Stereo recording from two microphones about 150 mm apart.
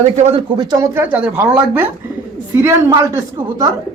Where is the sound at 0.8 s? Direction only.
15° right (ahead or behind).